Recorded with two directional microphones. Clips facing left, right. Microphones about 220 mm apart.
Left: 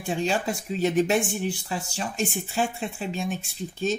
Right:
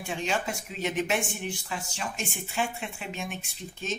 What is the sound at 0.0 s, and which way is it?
Speech, 35° left (ahead or behind).